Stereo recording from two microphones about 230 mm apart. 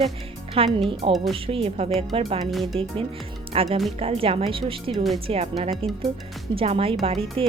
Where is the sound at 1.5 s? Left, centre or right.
Right.